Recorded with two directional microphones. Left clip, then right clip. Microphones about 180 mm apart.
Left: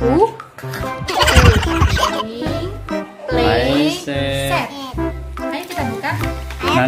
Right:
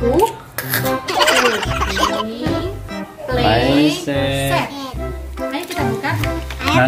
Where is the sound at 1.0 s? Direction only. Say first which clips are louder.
Left 1 dB; centre (ahead or behind).